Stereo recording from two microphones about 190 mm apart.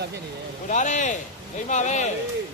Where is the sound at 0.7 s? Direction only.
40° left (ahead or behind).